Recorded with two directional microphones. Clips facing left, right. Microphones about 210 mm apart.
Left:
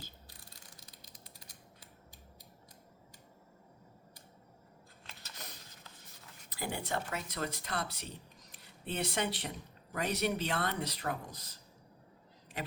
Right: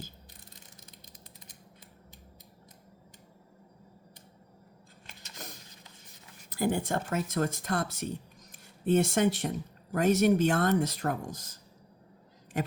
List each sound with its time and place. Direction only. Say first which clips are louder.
0.3 s ratchet: right 2 dB; 20° right (ahead or behind)
6.5 s a man's voice: right 8 dB; 45° right (ahead or behind)